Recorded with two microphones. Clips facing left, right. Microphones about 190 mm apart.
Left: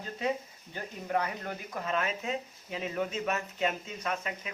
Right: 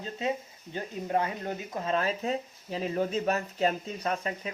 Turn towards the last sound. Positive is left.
turn(degrees=-35)  # may be behind; listen again after turning